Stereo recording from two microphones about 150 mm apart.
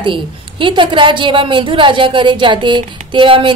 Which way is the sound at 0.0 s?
35° right (ahead or behind).